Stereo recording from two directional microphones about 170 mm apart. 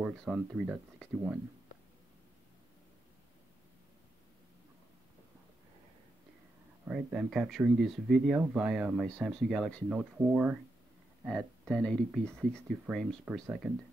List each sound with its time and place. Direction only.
0.0 s speech: 5° right (ahead or behind)
6.9 s speech: 5° right (ahead or behind)